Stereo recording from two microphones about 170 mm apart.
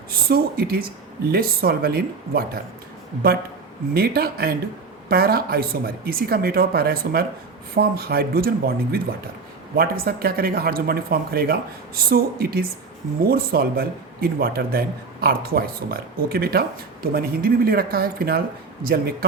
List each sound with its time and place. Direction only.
0.1 s a man's voice: 60° right (ahead or behind)
3.9 s a man's voice: 65° right (ahead or behind)